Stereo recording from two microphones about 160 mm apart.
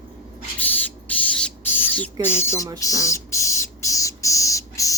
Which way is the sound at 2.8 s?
20° left (ahead or behind).